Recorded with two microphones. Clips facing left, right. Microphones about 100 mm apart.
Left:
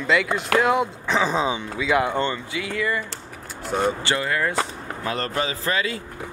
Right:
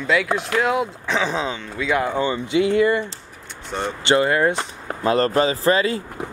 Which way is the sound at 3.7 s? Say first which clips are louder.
Left 4 dB; 10° left (ahead or behind).